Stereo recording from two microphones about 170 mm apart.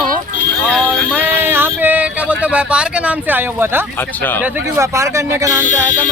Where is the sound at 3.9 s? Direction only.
10° left (ahead or behind).